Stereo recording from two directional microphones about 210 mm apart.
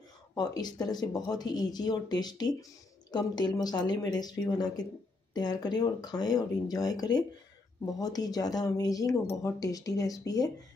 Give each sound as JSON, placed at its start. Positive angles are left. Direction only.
{"t": 0.3, "sound": "speech", "side_deg": 20}